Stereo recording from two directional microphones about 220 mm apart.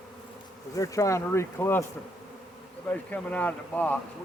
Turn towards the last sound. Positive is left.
turn(degrees=5)  # may be behind; listen again after turning